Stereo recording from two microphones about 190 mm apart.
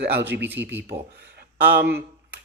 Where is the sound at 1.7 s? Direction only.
60° right (ahead or behind).